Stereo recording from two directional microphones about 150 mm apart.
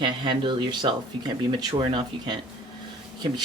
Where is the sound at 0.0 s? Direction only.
30° right (ahead or behind).